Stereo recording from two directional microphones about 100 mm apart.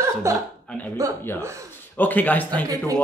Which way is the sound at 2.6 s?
35° right (ahead or behind).